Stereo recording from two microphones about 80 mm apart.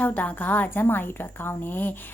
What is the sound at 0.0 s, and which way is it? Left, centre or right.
A woman's voice, centre.